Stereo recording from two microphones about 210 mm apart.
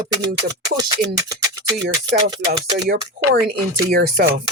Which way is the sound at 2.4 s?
45° right (ahead or behind).